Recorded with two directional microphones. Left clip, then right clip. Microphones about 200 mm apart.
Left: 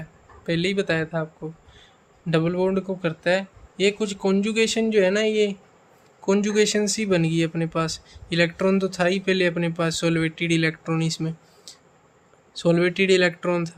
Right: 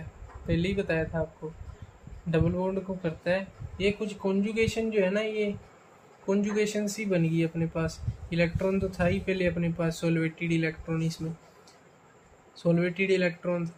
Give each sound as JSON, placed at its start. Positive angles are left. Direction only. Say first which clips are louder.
{"t": 0.4, "sound": "speech", "louder": "left 6 dB", "side_deg": 45}
{"t": 2.3, "sound": "speech", "louder": "left 6 dB", "side_deg": 50}
{"t": 12.5, "sound": "speech", "louder": "left 7 dB", "side_deg": 45}